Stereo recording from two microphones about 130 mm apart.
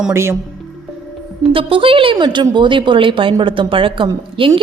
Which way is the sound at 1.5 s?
45° right (ahead or behind).